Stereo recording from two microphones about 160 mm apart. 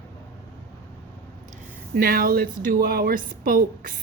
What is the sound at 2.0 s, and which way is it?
Speech, 65° right (ahead or behind).